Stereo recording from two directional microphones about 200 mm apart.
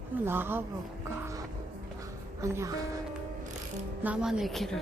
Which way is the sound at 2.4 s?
15° right (ahead or behind).